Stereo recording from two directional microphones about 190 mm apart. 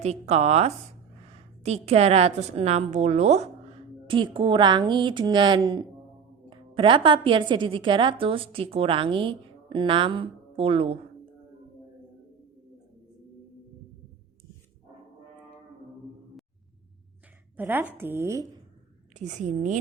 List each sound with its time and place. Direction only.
0.0 s a woman's voice: 35° right (ahead or behind)
17.6 s speech: 10° right (ahead or behind)
19.1 s a woman's voice: 40° right (ahead or behind)